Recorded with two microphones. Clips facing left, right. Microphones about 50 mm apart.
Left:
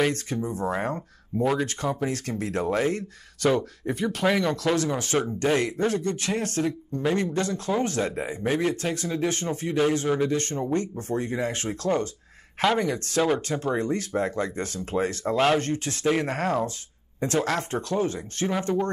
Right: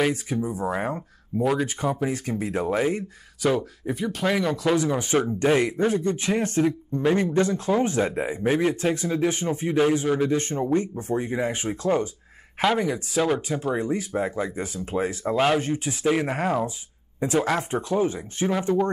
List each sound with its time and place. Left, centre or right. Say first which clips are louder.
0.0 s speech: right 1 dB; centre
9.8 s speech: right 2 dB; centre